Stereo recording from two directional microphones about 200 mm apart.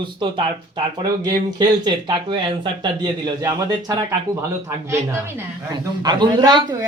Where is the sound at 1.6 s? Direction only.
25° right (ahead or behind).